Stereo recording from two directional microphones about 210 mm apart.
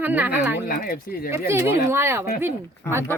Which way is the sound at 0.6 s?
45° left (ahead or behind).